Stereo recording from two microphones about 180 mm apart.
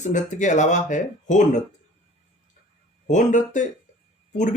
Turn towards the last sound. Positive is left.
turn(degrees=40)  # may be behind; listen again after turning